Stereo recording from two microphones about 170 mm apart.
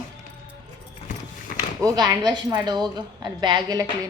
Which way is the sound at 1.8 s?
20° right (ahead or behind).